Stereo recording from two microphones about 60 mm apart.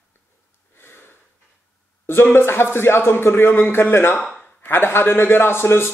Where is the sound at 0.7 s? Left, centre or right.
Left.